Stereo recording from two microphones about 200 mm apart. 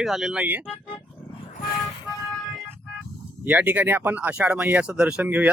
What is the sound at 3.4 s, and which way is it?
Speech, 10° right (ahead or behind).